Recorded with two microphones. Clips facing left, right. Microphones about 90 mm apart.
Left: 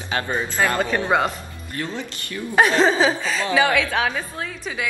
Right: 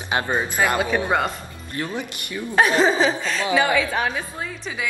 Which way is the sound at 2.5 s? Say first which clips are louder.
Left 1 dB; centre (ahead or behind).